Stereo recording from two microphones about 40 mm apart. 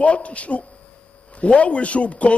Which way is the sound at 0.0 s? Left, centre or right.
Left.